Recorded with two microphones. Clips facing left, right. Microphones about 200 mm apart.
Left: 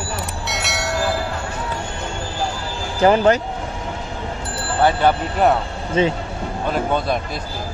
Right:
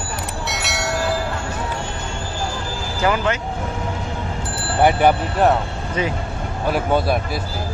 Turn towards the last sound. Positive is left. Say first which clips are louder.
# right 2 dB
turn(degrees=-10)  # may be behind; listen again after turning